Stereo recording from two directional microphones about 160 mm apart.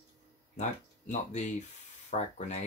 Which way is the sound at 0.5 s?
50° left (ahead or behind).